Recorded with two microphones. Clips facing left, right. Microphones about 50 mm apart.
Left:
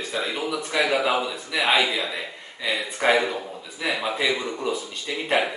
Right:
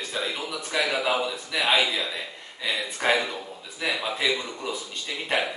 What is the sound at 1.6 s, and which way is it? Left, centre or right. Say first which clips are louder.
Speech: left 2 dB; left.